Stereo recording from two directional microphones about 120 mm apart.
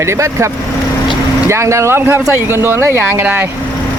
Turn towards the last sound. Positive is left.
turn(degrees=-20)  # may be behind; listen again after turning